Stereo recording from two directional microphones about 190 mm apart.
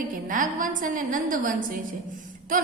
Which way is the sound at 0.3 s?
45° right (ahead or behind).